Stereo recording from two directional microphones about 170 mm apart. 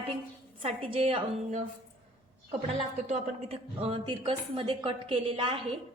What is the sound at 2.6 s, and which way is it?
A woman's voice, 35° right (ahead or behind).